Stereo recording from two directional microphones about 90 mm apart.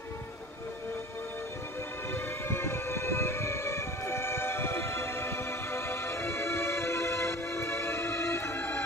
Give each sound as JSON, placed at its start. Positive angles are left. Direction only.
{"t": 2.1, "sound": "siren", "side_deg": 25}